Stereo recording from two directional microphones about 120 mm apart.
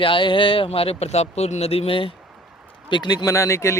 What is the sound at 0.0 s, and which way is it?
A man's voice, 45° left (ahead or behind).